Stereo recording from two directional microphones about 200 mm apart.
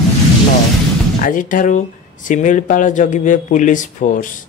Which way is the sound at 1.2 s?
40° left (ahead or behind).